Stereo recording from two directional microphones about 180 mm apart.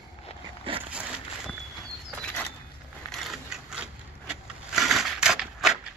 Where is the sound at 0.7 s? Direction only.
30° right (ahead or behind).